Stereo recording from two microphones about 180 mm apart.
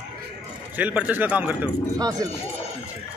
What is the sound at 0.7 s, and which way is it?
Speech, 10° right (ahead or behind).